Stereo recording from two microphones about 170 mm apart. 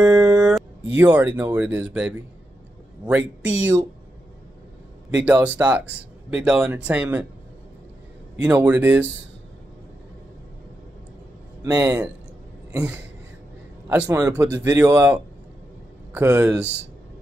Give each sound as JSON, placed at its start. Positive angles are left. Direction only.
{"t": 0.0, "sound": "mantra", "side_deg": -20}
{"t": 0.9, "sound": "speech", "side_deg": -10}
{"t": 5.1, "sound": "speech", "side_deg": -10}
{"t": 8.4, "sound": "speech", "side_deg": -10}
{"t": 11.6, "sound": "a man's voice", "side_deg": -20}
{"t": 13.8, "sound": "a man's voice", "side_deg": -15}